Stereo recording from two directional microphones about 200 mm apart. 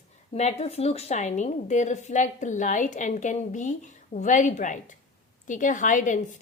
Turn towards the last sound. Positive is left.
turn(degrees=40)  # may be behind; listen again after turning